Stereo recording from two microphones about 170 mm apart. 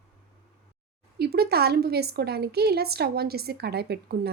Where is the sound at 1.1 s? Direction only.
65° right (ahead or behind).